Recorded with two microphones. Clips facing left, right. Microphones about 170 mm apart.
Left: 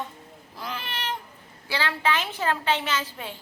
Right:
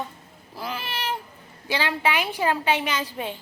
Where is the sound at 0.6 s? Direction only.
5° right (ahead or behind).